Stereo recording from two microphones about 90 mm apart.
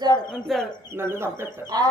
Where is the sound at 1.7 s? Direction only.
50° right (ahead or behind).